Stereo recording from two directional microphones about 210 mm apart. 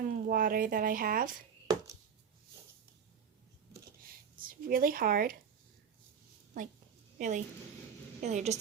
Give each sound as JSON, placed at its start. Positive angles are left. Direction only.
{"t": 0.0, "sound": "speech", "side_deg": -40}
{"t": 4.6, "sound": "speech", "side_deg": -45}
{"t": 7.2, "sound": "a woman's voice", "side_deg": -35}